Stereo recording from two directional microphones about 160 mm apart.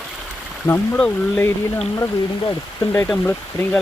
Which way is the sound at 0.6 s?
15° left (ahead or behind).